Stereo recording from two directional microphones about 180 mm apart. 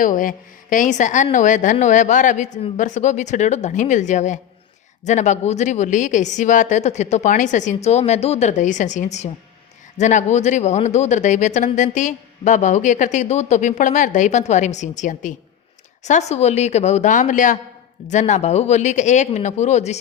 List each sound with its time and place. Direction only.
0.0 s a woman's voice: 50° left (ahead or behind)